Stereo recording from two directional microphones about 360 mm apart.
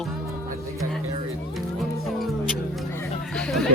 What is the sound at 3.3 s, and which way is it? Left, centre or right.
Chatter, centre.